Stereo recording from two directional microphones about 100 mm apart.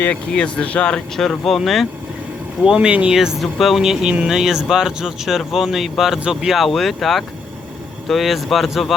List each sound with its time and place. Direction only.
0.0 s speech: 15° left (ahead or behind)
2.6 s speech: 10° right (ahead or behind)